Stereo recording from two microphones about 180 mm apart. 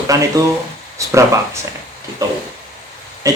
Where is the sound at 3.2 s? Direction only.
20° right (ahead or behind).